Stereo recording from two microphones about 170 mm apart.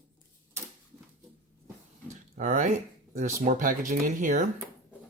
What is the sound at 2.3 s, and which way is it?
Speech, 50° right (ahead or behind).